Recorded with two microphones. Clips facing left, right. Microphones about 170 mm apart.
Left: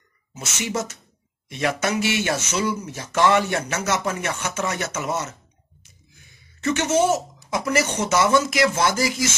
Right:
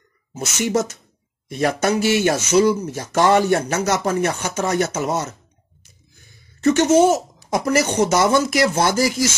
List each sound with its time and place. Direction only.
0.3 s speech: 40° right (ahead or behind)
6.6 s speech: 40° right (ahead or behind)